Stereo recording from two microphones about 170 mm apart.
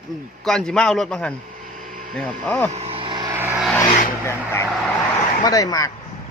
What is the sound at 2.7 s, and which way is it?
Vehicle, 35° right (ahead or behind).